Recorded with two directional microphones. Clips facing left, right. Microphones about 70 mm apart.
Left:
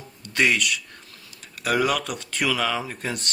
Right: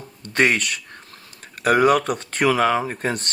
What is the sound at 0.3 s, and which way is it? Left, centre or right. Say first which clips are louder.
Speech: right 3 dB; right.